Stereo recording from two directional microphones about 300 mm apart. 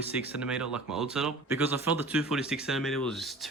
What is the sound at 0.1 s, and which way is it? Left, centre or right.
Speech, centre.